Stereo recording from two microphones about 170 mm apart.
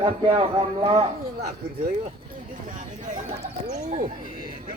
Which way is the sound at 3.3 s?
40° right (ahead or behind).